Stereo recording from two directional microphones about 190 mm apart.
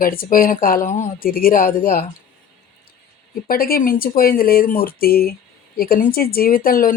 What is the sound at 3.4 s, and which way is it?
Speech, 50° left (ahead or behind).